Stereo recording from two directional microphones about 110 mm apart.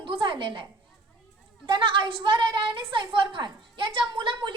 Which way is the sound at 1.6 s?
50° right (ahead or behind).